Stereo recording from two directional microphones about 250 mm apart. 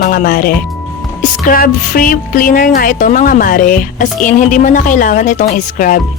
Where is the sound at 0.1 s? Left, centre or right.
Left.